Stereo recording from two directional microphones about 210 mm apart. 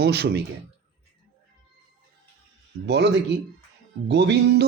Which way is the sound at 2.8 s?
55° right (ahead or behind).